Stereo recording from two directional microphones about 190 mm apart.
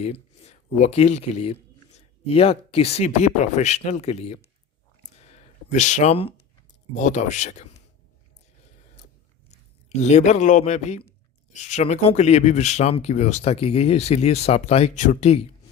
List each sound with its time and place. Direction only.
0.0 s speech: 35° left (ahead or behind)
5.2 s a sound: 35° left (ahead or behind)
6.9 s speech: 40° left (ahead or behind)
9.5 s a man's voice: 35° left (ahead or behind)